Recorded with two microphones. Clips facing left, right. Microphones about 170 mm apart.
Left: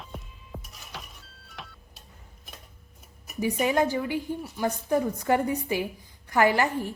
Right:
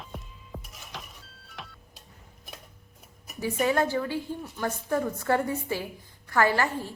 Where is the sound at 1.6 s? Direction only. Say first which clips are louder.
Even; centre (ahead or behind).